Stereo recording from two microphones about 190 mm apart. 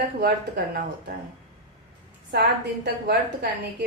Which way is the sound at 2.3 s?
60° right (ahead or behind).